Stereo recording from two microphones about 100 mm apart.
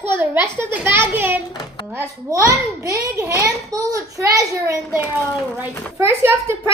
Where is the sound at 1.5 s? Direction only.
45° left (ahead or behind).